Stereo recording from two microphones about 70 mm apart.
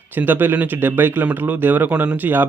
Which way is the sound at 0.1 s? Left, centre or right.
Right.